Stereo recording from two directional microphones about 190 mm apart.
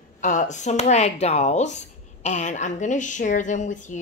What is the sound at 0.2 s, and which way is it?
A woman's voice, 40° left (ahead or behind).